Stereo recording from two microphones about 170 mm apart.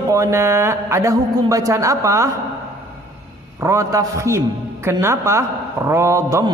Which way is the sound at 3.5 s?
15° right (ahead or behind).